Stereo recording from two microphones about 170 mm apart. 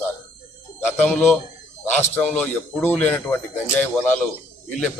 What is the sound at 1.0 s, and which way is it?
Speech, 5° left (ahead or behind).